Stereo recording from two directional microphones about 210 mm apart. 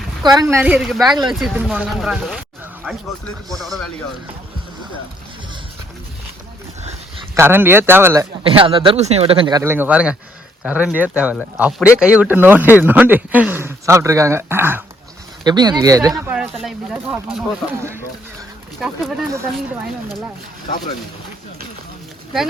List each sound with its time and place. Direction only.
0.2 s speech: 20° right (ahead or behind); by 1.0 s centre (ahead or behind)
1.0 s speech: 20° right (ahead or behind)
1.3 s speech: centre (ahead or behind)
3.5 s speech: centre (ahead or behind)
7.3 s speech: 10° right (ahead or behind)
8.4 s speech: 25° right (ahead or behind)
16.2 s speech: 5° right (ahead or behind)